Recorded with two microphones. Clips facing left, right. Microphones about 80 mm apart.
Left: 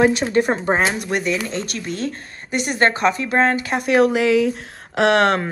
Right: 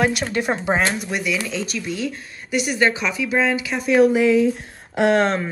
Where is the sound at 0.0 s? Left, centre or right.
Left.